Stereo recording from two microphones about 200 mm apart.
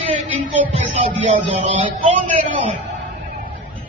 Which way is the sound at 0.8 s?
30° right (ahead or behind).